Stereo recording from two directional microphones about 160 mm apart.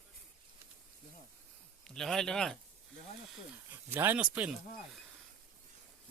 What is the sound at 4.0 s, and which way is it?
Speech, 10° right (ahead or behind).